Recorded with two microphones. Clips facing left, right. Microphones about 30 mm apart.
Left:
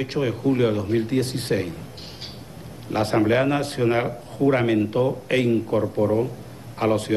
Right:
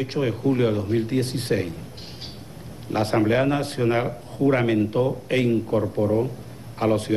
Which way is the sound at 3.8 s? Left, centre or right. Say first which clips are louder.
Left 1 dB; left.